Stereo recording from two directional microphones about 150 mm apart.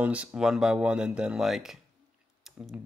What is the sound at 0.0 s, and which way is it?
Speech, 10° right (ahead or behind).